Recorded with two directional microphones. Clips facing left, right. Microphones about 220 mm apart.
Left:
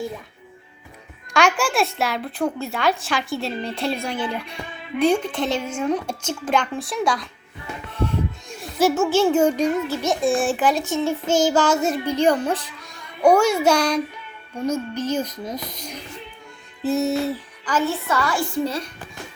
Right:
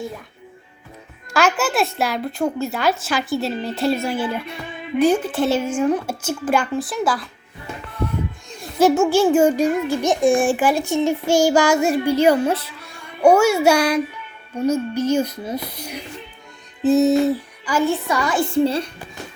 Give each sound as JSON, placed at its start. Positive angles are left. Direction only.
{"t": 1.3, "sound": "a woman's voice", "side_deg": -5}
{"t": 8.8, "sound": "a child's voice", "side_deg": -10}